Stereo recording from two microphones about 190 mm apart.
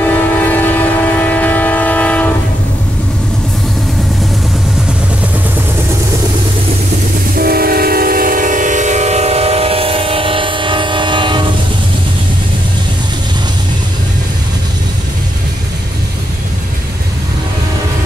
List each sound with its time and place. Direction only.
0.0 s train: 10° left (ahead or behind)
7.3 s train: 50° right (ahead or behind); by 11.4 s 25° right (ahead or behind)